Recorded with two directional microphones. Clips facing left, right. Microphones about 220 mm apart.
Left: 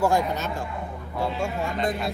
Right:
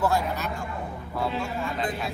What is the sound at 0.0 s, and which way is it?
Speech, 15° left (ahead or behind).